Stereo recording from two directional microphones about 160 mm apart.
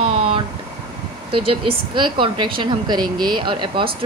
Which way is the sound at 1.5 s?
35° right (ahead or behind).